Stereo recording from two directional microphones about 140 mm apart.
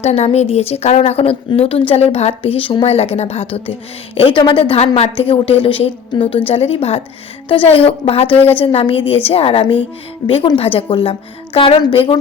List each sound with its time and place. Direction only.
0.0 s a woman's voice: 50° left (ahead or behind)
8.3 s a woman's voice: 15° left (ahead or behind)
8.5 s a woman's voice: 40° left (ahead or behind)